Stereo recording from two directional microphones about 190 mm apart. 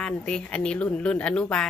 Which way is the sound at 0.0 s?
5° left (ahead or behind).